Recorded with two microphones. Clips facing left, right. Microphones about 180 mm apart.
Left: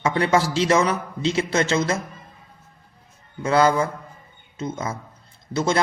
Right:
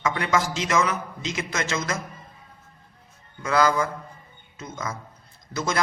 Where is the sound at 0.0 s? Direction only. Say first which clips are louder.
Left 4 dB; 30° left (ahead or behind).